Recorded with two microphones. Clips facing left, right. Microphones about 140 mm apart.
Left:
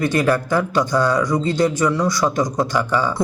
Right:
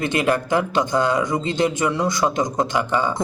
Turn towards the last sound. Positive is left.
turn(degrees=-20)  # may be behind; listen again after turning